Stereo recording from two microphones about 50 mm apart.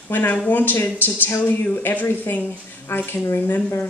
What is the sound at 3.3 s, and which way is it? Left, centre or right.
Speech, left.